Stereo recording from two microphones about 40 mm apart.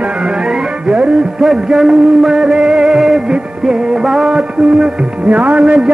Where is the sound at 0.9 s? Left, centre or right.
Right.